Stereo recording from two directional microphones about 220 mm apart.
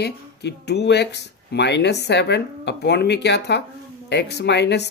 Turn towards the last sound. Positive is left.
turn(degrees=50)  # may be behind; listen again after turning